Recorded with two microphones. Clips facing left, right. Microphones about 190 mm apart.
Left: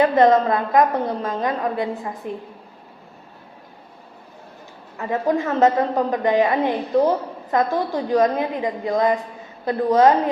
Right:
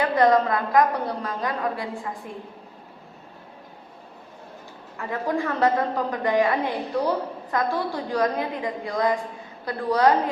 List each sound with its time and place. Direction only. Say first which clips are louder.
0.0 s a woman's voice: left 4 dB; 25° left (ahead or behind)
4.9 s a woman's voice: left 5 dB; 20° left (ahead or behind)